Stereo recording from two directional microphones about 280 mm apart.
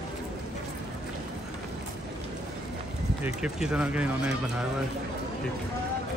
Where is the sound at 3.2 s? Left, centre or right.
Centre.